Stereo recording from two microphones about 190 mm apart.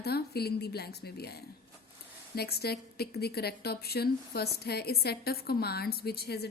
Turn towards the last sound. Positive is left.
turn(degrees=55)  # may be behind; listen again after turning